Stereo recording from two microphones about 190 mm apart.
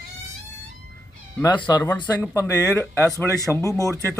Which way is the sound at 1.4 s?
20° left (ahead or behind).